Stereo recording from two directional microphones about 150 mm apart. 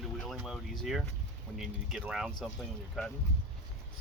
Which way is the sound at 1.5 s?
Centre (ahead or behind).